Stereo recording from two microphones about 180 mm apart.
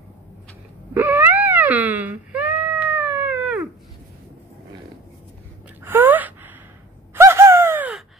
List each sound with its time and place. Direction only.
0.9 s wail: 10° right (ahead or behind)
5.9 s gasp: 10° right (ahead or behind)
7.2 s a sound: 15° right (ahead or behind)